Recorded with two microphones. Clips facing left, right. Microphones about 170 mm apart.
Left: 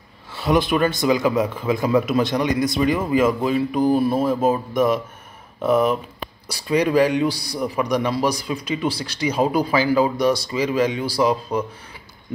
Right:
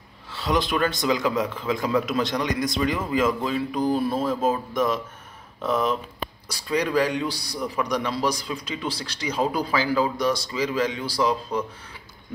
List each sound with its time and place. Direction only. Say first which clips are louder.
0.4 s speech: left 5 dB; 55° left (ahead or behind)
0.7 s a man's voice: left 5 dB; 10° left (ahead or behind)